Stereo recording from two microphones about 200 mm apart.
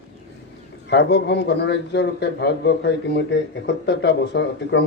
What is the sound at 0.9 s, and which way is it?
A man's voice, 60° left (ahead or behind).